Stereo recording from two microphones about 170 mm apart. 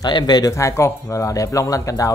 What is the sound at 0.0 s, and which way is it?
Speech, 25° left (ahead or behind).